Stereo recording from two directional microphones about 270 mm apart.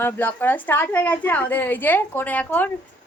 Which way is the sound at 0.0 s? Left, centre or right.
Centre.